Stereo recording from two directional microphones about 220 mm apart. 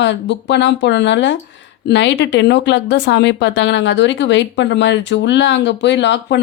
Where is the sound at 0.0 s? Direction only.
55° left (ahead or behind).